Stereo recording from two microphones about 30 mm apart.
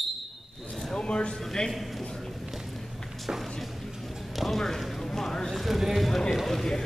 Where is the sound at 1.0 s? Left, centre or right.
Left.